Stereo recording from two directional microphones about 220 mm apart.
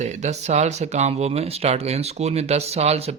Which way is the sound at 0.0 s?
30° right (ahead or behind).